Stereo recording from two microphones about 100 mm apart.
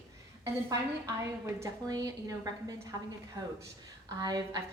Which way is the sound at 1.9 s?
40° right (ahead or behind).